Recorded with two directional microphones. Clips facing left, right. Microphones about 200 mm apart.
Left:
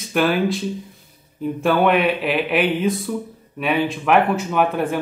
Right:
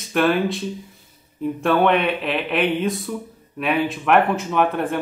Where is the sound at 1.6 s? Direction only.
5° left (ahead or behind).